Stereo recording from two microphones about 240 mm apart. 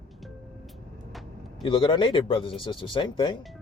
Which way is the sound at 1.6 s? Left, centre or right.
Left.